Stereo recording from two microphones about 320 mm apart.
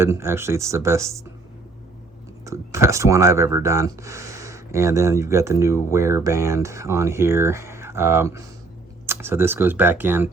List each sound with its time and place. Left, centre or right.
0.0 s speech: centre
2.4 s speech: centre